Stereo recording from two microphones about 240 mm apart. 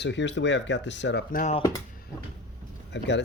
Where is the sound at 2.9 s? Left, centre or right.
Left.